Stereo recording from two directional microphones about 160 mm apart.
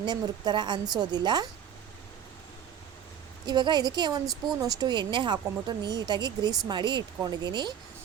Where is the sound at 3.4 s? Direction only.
25° right (ahead or behind).